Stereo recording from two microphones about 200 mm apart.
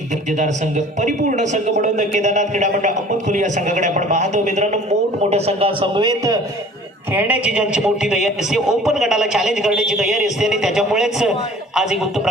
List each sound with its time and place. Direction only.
0.3 s a man's voice: 35° right (ahead or behind); by 12.3 s 5° right (ahead or behind)